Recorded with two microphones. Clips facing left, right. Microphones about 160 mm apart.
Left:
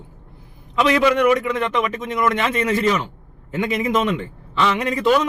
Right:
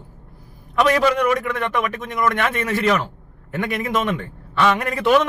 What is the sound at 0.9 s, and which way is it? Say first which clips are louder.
A man's voice: left 3 dB; 45° right (ahead or behind).